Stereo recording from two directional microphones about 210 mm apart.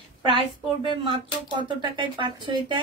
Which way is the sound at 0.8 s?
25° right (ahead or behind).